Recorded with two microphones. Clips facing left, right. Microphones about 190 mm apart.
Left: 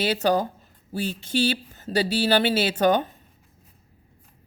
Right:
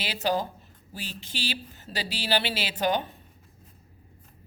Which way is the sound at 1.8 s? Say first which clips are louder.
Left 15 dB; 45° left (ahead or behind).